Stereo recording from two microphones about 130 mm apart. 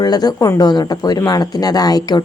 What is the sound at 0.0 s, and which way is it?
Speech, 30° left (ahead or behind).